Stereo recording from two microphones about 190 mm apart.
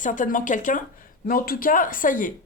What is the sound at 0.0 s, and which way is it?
Speech, 45° left (ahead or behind).